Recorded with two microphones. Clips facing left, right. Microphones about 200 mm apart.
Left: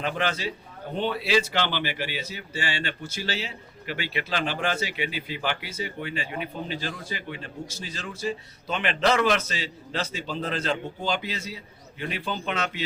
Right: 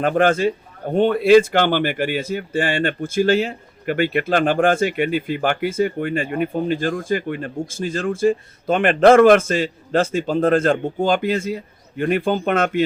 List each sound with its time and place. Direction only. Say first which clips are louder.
0.0 s a man's voice: right 12 dB; 50° right (ahead or behind)